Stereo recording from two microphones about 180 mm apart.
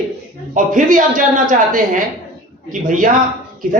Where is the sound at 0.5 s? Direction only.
45° right (ahead or behind).